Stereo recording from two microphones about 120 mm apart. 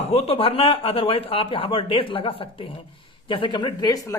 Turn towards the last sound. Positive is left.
turn(degrees=30)  # may be behind; listen again after turning